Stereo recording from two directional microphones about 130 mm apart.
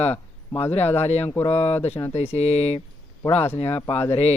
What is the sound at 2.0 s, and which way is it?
Speech, 25° left (ahead or behind).